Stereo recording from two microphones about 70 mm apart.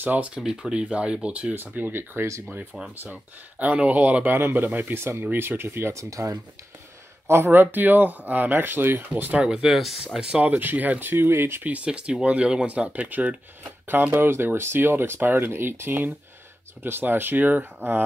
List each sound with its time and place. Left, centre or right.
0.0 s speech: right
0.3 s speech: centre; by 5.9 s right
5.9 s speech: right
7.2 s speech: right
9.1 s speech: centre
10.4 s speech: right
11.6 s speech: centre
14.1 s speech: right